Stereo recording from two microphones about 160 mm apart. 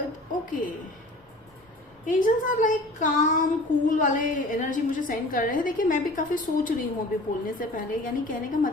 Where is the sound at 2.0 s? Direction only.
55° left (ahead or behind).